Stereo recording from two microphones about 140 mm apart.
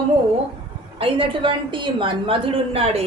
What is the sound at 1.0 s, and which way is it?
A woman's voice, 40° right (ahead or behind).